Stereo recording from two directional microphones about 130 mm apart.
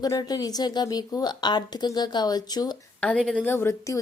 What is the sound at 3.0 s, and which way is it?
A woman's voice, 5° left (ahead or behind).